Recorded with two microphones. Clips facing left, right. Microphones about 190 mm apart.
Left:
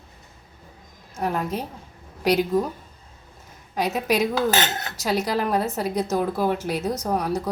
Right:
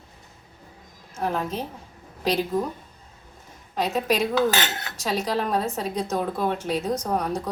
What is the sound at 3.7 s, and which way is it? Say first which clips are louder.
Speech: left 1 dB; 10° left (ahead or behind).